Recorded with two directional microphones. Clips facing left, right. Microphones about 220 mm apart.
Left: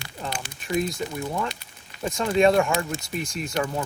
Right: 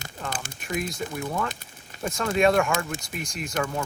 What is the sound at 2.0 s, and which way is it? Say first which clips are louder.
Speech: left 2 dB; 20° left (ahead or behind).